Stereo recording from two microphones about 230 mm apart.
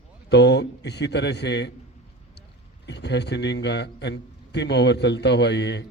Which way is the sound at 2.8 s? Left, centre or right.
Left.